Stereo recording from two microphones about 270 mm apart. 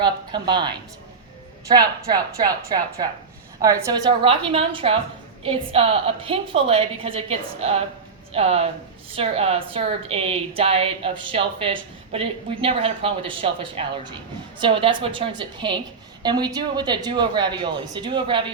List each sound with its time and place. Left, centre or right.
0.0 s a woman's voice: centre